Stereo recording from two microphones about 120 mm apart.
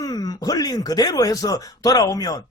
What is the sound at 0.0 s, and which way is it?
Speech, 35° left (ahead or behind).